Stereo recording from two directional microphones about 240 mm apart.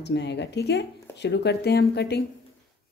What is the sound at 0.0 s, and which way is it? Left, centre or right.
Speech, left.